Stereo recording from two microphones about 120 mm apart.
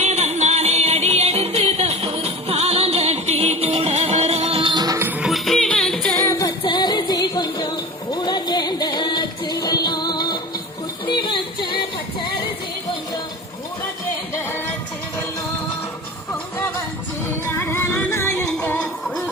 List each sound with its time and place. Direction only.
0.0 s music: 65° right (ahead or behind); by 4.9 s 35° right (ahead or behind)
4.9 s music: 15° right (ahead or behind)
5.3 s music: 5° left (ahead or behind)
6.1 s music: 25° left (ahead or behind)
6.6 s music: 35° left (ahead or behind)
11.0 s a sound: 40° left (ahead or behind)
17.2 s music: 20° left (ahead or behind)